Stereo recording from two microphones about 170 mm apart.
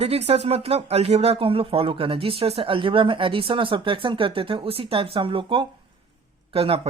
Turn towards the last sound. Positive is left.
turn(degrees=-35)  # may be behind; listen again after turning